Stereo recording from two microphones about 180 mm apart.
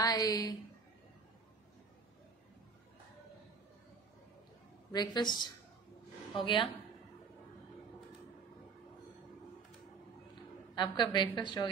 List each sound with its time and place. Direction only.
0.0 s a woman's voice: 20° left (ahead or behind)
4.9 s a woman's voice: 25° left (ahead or behind)
10.7 s a woman's voice: 25° left (ahead or behind)